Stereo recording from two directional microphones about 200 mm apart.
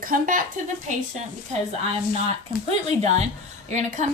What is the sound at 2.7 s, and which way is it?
Speech, 35° right (ahead or behind).